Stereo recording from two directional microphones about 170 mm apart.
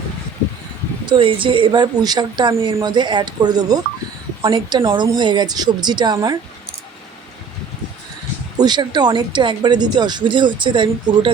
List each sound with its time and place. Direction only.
1.0 s speech: 30° right (ahead or behind)
8.5 s speech: 25° right (ahead or behind)